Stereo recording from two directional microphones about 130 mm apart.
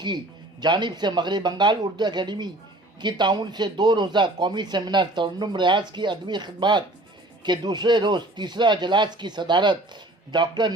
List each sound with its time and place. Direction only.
0.6 s a man's voice: 35° right (ahead or behind)